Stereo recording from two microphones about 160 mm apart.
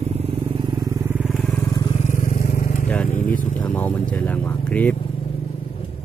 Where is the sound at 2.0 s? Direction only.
50° left (ahead or behind).